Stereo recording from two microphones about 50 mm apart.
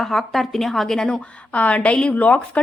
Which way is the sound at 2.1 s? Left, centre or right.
Left.